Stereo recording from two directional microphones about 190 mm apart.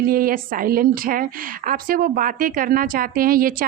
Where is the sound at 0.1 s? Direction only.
50° right (ahead or behind).